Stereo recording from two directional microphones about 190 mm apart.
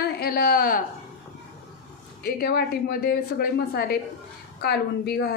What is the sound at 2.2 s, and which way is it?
A woman's voice, 55° left (ahead or behind).